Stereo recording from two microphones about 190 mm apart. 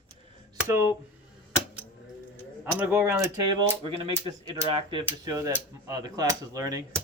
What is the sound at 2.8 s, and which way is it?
Speech, 15° right (ahead or behind).